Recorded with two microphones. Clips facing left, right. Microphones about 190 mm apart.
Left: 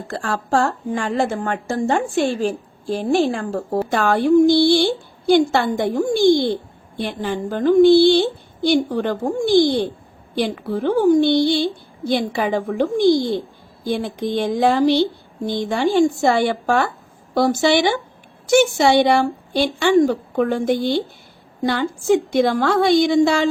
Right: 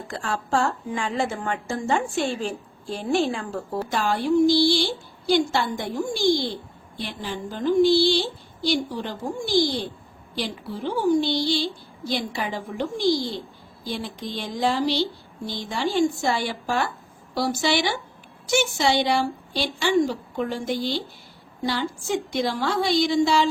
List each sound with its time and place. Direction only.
0.1 s a woman's voice: 50° left (ahead or behind)
3.8 s a woman's voice: 55° left (ahead or behind)